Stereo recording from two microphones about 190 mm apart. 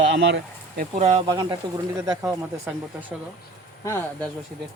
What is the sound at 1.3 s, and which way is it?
Speech, 20° right (ahead or behind).